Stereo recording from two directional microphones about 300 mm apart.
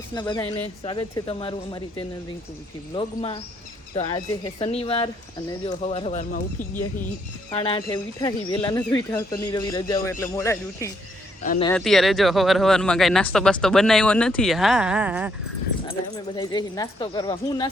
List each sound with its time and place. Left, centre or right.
0.1 s speech: centre
15.9 s speech: centre